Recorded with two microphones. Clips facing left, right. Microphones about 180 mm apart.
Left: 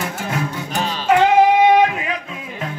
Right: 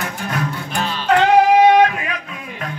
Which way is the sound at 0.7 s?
40° left (ahead or behind).